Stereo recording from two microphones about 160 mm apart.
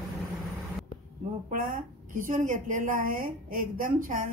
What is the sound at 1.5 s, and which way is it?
A woman's voice, 55° right (ahead or behind).